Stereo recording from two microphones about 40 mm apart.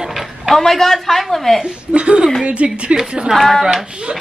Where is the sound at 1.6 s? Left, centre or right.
Right.